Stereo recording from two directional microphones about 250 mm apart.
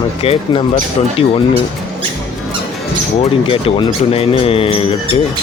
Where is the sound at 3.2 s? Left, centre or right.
Left.